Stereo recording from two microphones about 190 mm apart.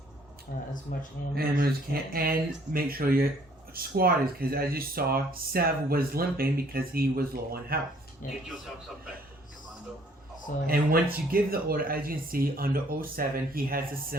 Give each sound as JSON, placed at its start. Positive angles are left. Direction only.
{"t": 0.5, "sound": "a man's voice", "side_deg": 55}
{"t": 1.4, "sound": "speech", "side_deg": -55}
{"t": 8.2, "sound": "a man's voice", "side_deg": 45}
{"t": 10.7, "sound": "speech", "side_deg": -50}